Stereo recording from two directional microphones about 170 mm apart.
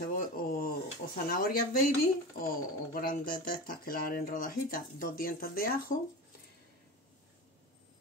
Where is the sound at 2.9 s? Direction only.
60° left (ahead or behind).